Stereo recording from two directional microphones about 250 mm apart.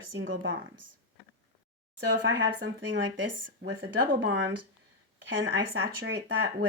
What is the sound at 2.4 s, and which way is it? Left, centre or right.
Speech, right.